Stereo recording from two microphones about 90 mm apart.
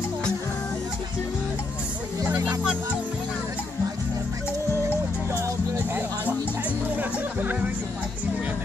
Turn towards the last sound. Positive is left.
turn(degrees=-15)  # may be behind; listen again after turning